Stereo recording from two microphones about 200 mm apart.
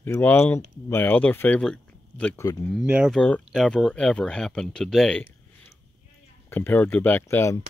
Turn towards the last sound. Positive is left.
turn(degrees=15)  # may be behind; listen again after turning